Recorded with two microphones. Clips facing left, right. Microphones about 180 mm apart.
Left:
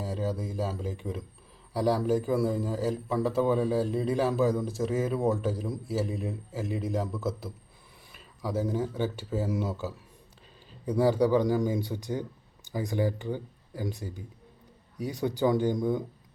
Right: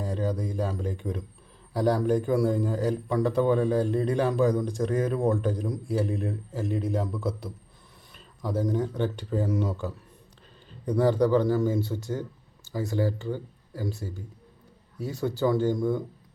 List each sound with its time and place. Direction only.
0.0 s a man's voice: 5° left (ahead or behind)